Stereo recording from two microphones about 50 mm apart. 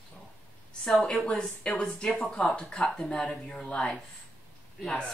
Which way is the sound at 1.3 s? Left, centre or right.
Left.